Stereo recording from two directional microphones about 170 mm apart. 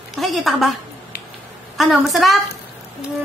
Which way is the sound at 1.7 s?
Centre (ahead or behind).